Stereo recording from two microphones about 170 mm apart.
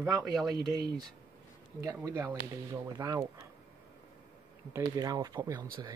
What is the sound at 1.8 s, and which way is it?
Speech, 20° right (ahead or behind).